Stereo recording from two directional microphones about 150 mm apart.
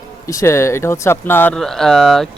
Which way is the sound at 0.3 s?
20° left (ahead or behind).